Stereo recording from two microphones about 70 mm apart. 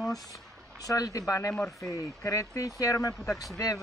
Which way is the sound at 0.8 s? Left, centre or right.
Left.